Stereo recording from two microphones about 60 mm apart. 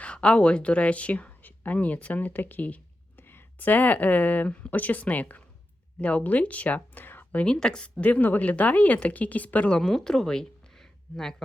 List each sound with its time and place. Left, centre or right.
0.0 s speech: centre
3.2 s speech: left
7.4 s speech: centre
7.9 s speech: left
9.7 s speech: centre